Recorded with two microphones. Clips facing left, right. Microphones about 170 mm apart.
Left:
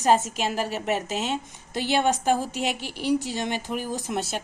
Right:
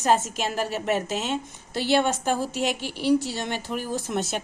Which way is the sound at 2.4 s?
40° right (ahead or behind).